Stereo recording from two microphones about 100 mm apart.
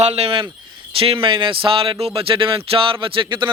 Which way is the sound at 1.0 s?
65° right (ahead or behind).